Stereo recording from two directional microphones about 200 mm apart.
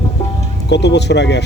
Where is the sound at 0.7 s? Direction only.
60° left (ahead or behind).